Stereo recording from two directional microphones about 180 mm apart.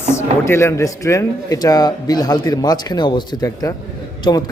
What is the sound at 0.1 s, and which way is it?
A man's voice, 15° left (ahead or behind).